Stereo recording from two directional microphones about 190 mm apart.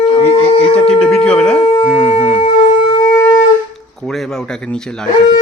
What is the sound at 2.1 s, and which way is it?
Shofar, 30° left (ahead or behind).